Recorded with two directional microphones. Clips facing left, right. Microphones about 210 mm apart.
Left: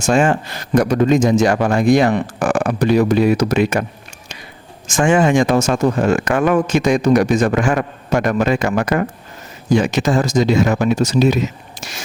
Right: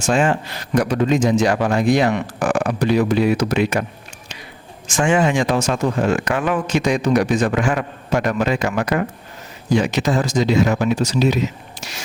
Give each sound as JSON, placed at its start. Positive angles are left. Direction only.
{"t": 0.0, "sound": "speech", "side_deg": 45}
{"t": 4.9, "sound": "speech", "side_deg": 45}